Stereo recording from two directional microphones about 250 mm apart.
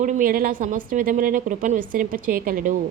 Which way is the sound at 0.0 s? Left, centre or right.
Right.